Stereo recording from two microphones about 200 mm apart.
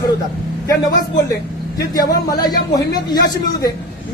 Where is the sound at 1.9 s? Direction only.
20° left (ahead or behind).